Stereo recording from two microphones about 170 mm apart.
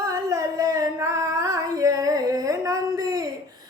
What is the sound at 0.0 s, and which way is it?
Singing, 20° right (ahead or behind).